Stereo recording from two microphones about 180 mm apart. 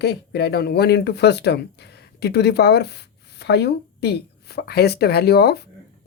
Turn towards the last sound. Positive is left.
turn(degrees=65)  # may be behind; listen again after turning